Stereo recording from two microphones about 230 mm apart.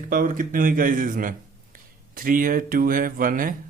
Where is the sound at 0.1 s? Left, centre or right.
Right.